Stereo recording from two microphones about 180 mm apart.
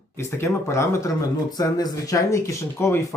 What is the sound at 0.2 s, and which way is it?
Speech, 15° left (ahead or behind).